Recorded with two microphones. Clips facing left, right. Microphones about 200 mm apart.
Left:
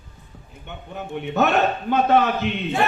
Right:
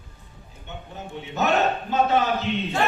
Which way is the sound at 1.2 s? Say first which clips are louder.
Left 3 dB; 60° left (ahead or behind).